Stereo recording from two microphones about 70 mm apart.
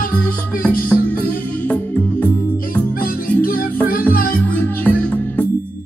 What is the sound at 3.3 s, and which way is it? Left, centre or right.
Music, left.